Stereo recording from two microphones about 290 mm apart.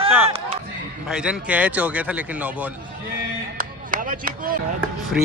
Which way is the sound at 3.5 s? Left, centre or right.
Right.